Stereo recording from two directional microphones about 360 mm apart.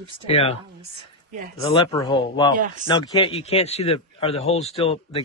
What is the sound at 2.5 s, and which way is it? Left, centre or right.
Speech, right.